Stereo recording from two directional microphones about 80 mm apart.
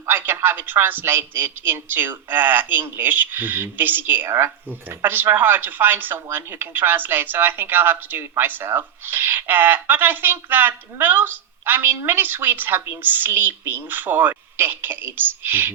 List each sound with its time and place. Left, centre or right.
0.1 s a woman's voice: right